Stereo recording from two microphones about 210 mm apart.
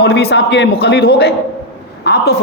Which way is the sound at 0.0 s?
50° left (ahead or behind).